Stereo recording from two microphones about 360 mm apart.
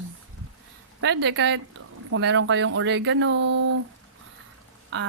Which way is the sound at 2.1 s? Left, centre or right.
Right.